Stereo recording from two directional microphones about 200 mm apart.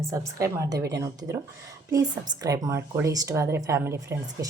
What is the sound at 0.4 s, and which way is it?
Speech, 15° right (ahead or behind).